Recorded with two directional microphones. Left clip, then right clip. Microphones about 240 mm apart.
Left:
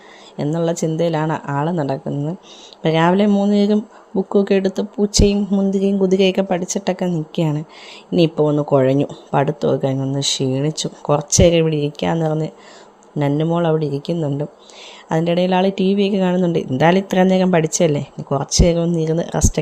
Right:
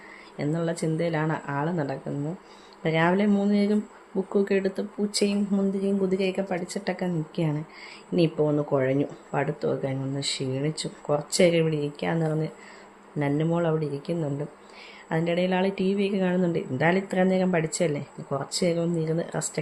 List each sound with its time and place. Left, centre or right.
0.3 s speech: left